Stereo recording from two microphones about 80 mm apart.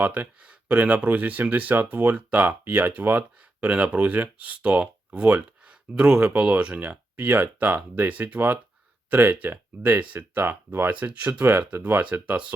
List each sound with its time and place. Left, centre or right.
0.0 s speech: right